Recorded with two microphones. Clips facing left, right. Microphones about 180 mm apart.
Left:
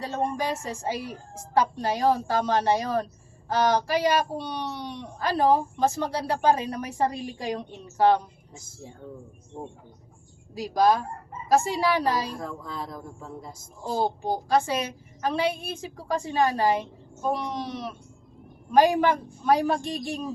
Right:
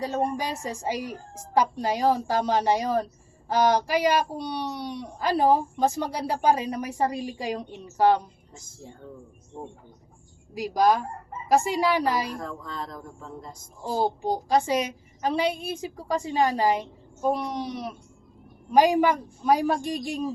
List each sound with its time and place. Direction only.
0.0 s a woman's voice: 15° right (ahead or behind)
10.6 s a woman's voice: 10° right (ahead or behind)
12.4 s speech: 5° left (ahead or behind)
13.8 s a woman's voice: 10° right (ahead or behind)